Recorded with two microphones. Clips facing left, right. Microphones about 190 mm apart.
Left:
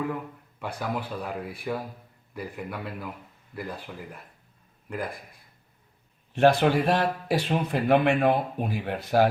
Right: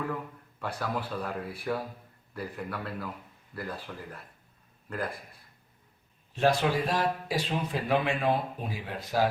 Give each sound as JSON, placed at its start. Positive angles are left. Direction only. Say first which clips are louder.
{"t": 0.6, "sound": "speech", "louder": "left 2 dB", "side_deg": 10}
{"t": 6.3, "sound": "speech", "louder": "left 5 dB", "side_deg": 60}